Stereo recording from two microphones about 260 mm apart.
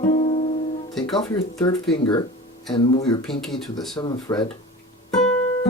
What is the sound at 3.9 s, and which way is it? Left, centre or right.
Speech, centre.